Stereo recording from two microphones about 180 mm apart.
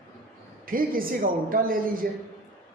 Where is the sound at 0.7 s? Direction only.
50° right (ahead or behind).